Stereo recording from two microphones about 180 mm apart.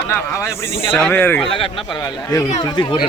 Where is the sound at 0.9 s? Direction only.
10° left (ahead or behind).